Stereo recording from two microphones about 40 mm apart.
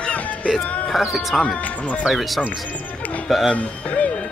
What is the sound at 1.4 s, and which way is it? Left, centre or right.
Speech, left.